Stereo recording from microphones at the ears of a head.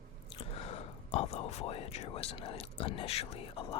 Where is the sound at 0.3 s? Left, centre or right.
Left.